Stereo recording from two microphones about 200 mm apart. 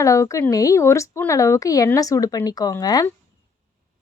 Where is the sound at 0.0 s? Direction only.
15° left (ahead or behind).